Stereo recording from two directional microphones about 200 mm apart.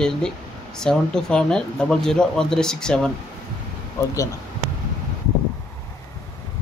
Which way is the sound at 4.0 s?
15° left (ahead or behind).